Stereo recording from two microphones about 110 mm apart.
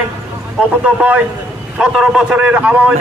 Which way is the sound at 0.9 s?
10° right (ahead or behind).